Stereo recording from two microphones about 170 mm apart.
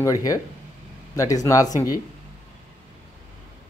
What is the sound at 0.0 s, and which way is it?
Speech, 20° left (ahead or behind).